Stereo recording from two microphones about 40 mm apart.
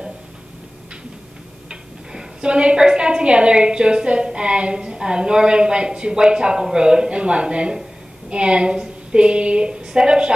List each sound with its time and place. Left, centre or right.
1.7 s a woman's voice: right